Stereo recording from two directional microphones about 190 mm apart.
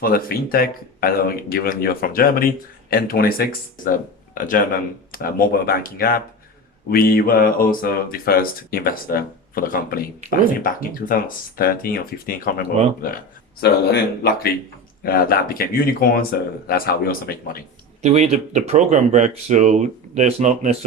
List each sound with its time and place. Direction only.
0.0 s speech: 50° left (ahead or behind)
18.0 s speech: 35° right (ahead or behind)